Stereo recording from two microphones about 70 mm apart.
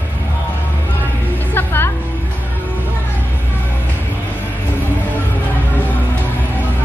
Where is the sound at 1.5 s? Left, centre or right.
Left.